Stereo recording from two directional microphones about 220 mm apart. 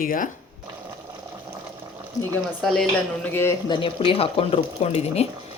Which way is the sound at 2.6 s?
Centre (ahead or behind).